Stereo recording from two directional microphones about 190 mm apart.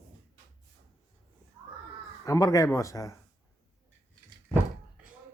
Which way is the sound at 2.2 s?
20° left (ahead or behind).